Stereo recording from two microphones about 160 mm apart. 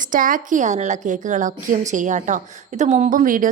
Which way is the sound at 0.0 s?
55° right (ahead or behind).